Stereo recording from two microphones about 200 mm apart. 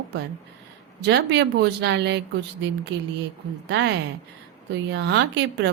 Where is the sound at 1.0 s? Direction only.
60° right (ahead or behind).